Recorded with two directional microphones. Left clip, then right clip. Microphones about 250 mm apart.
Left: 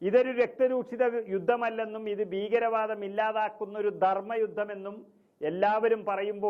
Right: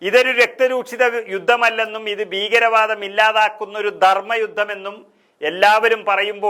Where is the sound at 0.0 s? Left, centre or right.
Centre.